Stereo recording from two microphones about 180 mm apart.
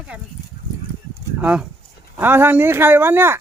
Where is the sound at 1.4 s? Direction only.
5° right (ahead or behind).